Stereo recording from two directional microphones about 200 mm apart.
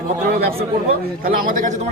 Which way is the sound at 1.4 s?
40° right (ahead or behind).